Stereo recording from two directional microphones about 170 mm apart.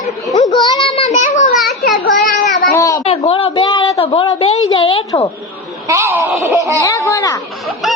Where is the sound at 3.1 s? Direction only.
35° left (ahead or behind).